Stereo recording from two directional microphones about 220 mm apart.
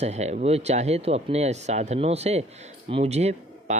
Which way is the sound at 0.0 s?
30° right (ahead or behind).